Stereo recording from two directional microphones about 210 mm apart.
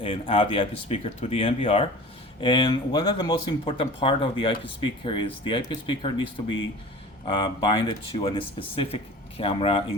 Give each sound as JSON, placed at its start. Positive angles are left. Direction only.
{"t": 0.0, "sound": "speech", "side_deg": 25}